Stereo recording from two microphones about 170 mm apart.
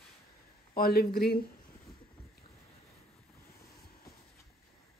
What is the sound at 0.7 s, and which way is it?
Speech, 60° left (ahead or behind).